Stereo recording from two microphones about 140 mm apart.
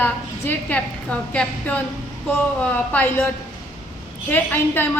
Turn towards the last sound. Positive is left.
turn(degrees=15)  # may be behind; listen again after turning